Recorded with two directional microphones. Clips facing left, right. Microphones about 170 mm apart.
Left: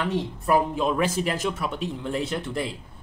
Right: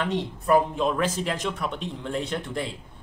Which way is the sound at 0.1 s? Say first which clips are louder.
Right 2 dB; 5° left (ahead or behind).